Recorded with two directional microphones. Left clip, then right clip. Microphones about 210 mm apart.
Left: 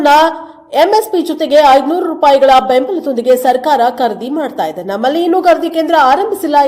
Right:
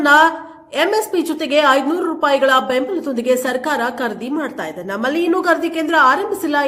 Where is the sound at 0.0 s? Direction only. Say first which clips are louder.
Left 3 dB; 10° left (ahead or behind).